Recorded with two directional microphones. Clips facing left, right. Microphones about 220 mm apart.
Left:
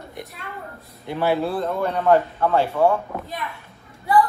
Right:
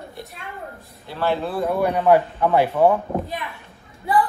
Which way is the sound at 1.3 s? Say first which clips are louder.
Left 2 dB; centre (ahead or behind).